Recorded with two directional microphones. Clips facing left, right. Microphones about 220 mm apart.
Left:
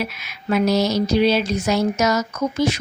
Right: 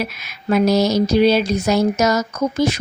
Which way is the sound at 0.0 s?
40° right (ahead or behind).